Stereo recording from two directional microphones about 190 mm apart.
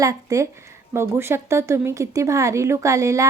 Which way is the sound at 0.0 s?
20° right (ahead or behind).